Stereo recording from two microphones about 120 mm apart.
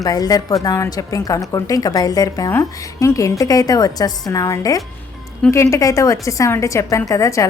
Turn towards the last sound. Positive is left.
turn(degrees=25)  # may be behind; listen again after turning